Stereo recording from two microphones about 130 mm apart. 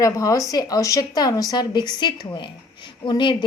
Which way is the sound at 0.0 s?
25° left (ahead or behind).